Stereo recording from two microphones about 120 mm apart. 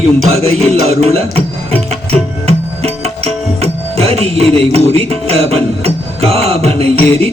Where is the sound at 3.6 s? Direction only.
60° right (ahead or behind).